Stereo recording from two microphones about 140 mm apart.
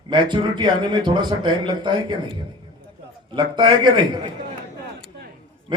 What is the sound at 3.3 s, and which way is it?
A man's voice, 30° right (ahead or behind).